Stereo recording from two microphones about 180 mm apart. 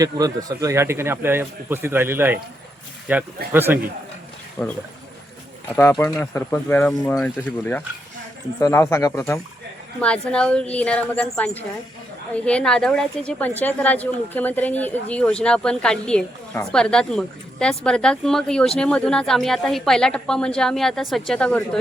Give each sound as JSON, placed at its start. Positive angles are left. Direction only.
{"t": 0.0, "sound": "speech", "side_deg": -20}
{"t": 4.6, "sound": "a woman's voice", "side_deg": 5}